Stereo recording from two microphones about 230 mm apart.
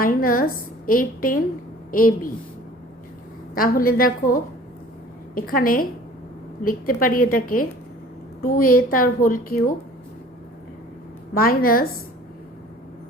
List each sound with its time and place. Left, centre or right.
0.0 s a woman's voice: left
3.5 s a woman's voice: left
11.3 s a woman's voice: left